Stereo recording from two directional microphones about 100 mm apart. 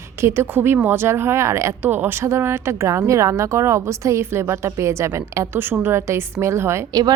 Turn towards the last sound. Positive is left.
turn(degrees=-25)  # may be behind; listen again after turning